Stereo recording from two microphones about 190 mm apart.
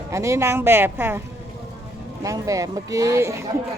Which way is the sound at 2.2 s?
15° right (ahead or behind).